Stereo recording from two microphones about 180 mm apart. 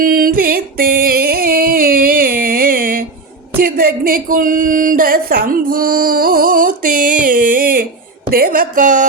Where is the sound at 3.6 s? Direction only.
55° right (ahead or behind).